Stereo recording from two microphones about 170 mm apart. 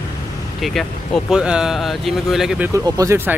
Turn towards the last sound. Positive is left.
turn(degrees=-20)  # may be behind; listen again after turning